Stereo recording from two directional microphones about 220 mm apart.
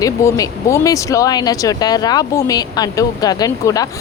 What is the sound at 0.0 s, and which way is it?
Speech, 15° left (ahead or behind).